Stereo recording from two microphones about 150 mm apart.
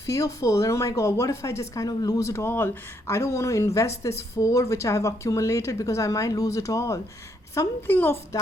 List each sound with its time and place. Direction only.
0.0 s a woman's voice: 20° left (ahead or behind)